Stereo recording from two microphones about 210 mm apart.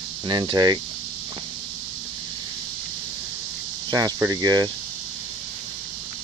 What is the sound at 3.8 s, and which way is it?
Speech, 20° right (ahead or behind).